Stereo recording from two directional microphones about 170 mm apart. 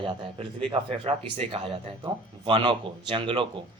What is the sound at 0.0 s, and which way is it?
Speech, 30° right (ahead or behind).